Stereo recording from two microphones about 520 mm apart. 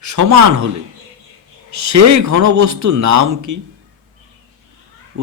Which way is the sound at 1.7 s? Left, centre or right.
Right.